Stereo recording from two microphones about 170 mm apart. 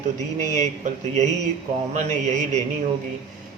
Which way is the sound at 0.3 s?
45° right (ahead or behind).